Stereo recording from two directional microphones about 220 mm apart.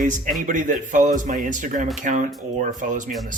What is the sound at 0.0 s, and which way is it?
Speech, 35° right (ahead or behind).